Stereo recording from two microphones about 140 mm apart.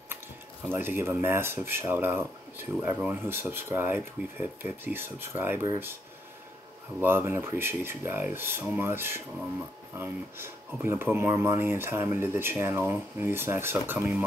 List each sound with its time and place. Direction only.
0.1 s speech: 15° right (ahead or behind)
7.0 s speech: 15° right (ahead or behind)